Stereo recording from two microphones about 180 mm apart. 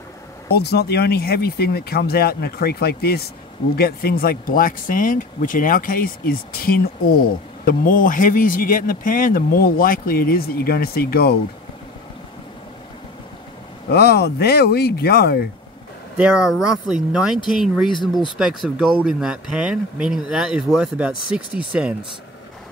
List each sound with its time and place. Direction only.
0.5 s a man's voice: 65° left (ahead or behind)
13.8 s speech: 60° left (ahead or behind)
16.2 s speech: 5° right (ahead or behind)